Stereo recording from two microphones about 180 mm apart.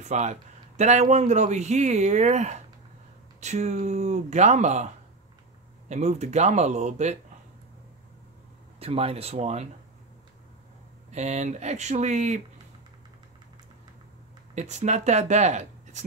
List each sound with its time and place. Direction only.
0.0 s speech: 40° right (ahead or behind)
5.9 s speech: 40° right (ahead or behind)
8.7 s speech: 35° right (ahead or behind)
11.1 s speech: 40° right (ahead or behind)
14.5 s speech: 40° right (ahead or behind)